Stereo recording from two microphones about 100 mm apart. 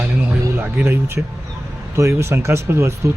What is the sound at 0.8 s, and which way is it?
Speech, 20° right (ahead or behind).